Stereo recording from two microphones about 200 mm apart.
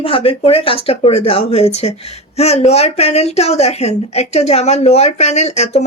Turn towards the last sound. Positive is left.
turn(degrees=35)  # may be behind; listen again after turning